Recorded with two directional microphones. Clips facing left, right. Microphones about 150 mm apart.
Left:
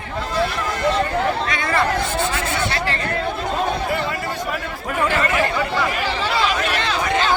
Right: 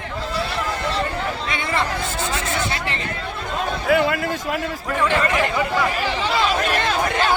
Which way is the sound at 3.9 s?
60° right (ahead or behind).